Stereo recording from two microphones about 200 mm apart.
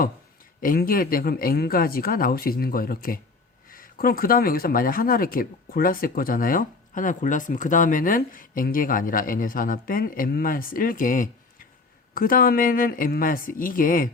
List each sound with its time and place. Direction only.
0.6 s speech: 45° left (ahead or behind)